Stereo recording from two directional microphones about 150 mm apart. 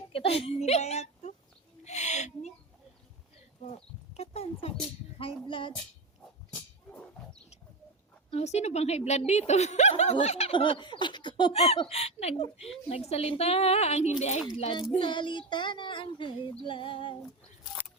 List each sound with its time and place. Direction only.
0.1 s speech: 40° left (ahead or behind)
1.8 s owl: 50° left (ahead or behind)
4.2 s a woman's voice: 45° left (ahead or behind)
5.1 s child singing: 35° left (ahead or behind)
8.3 s a woman's voice: 45° left (ahead or behind)
10.2 s child singing: 45° left (ahead or behind)
11.8 s a woman's voice: 40° left (ahead or behind)
14.6 s child singing: 35° left (ahead or behind)